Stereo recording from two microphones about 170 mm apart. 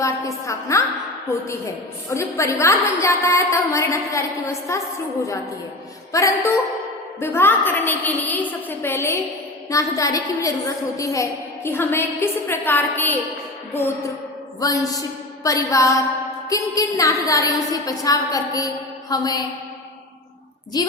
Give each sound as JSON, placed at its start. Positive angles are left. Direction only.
{"t": 0.0, "sound": "a woman's voice", "side_deg": 20}
{"t": 6.1, "sound": "a woman's voice", "side_deg": 20}
{"t": 14.6, "sound": "a woman's voice", "side_deg": 20}
{"t": 20.7, "sound": "a woman's voice", "side_deg": 25}